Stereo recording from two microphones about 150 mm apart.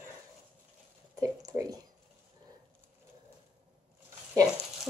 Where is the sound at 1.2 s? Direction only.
25° right (ahead or behind).